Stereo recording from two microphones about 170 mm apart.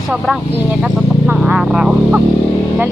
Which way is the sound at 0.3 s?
Centre (ahead or behind).